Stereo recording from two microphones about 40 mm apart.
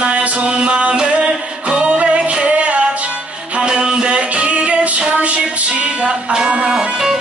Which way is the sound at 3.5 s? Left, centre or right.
Right.